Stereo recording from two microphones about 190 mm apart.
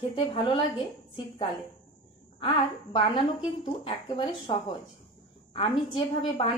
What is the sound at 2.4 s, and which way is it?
A woman's voice, 25° left (ahead or behind).